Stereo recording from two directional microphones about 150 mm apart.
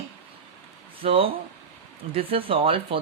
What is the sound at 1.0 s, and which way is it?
Speech, 40° right (ahead or behind).